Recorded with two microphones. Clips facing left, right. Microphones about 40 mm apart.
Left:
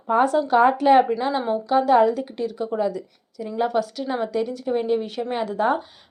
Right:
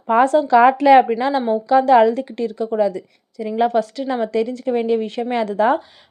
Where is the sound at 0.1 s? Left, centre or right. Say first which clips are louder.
Right 5 dB; right.